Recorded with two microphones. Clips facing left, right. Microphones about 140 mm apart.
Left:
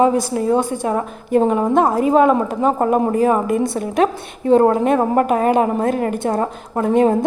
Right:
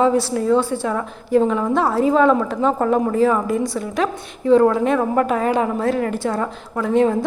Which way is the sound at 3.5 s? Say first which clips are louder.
Left 3 dB; 55° left (ahead or behind).